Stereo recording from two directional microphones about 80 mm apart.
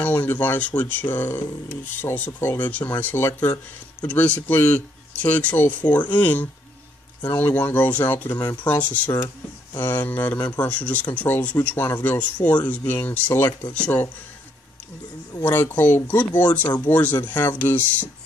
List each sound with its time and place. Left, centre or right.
0.0 s speech: left
13.5 s speech: left
13.7 s speech: centre
15.7 s speech: left